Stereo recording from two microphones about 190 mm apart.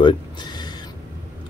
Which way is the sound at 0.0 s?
25° left (ahead or behind).